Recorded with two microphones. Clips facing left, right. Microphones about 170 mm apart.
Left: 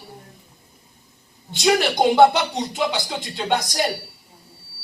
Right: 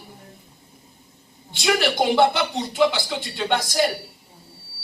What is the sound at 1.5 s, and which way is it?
Speech, 20° left (ahead or behind).